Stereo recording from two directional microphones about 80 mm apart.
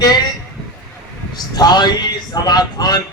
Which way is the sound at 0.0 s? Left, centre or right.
Left.